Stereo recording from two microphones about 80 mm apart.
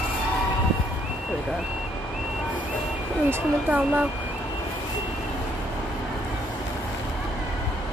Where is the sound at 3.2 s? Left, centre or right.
Right.